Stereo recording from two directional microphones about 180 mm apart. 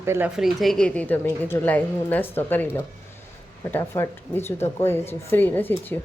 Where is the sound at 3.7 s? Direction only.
15° left (ahead or behind).